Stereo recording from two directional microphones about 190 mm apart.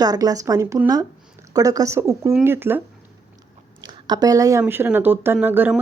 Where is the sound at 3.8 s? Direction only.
20° right (ahead or behind).